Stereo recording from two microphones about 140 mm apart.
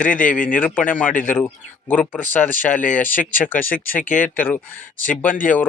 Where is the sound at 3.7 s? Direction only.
85° left.